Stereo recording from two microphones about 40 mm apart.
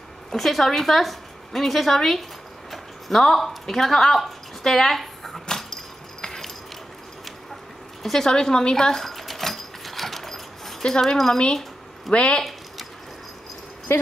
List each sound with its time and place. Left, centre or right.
0.3 s a woman's voice: centre
2.7 s a sound: centre
8.0 s a woman's voice: centre
8.3 s a sound: centre
10.8 s speech: centre
12.1 s speech: left